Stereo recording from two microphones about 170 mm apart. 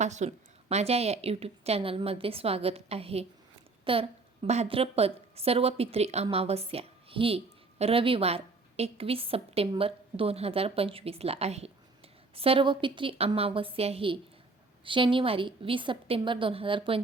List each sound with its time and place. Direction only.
0.0 s a woman's voice: 45° right (ahead or behind)